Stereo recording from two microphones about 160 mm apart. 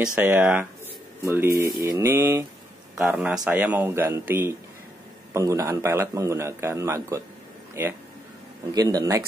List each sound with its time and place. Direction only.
0.0 s a man's voice: 10° right (ahead or behind)
8.7 s speech: 20° right (ahead or behind)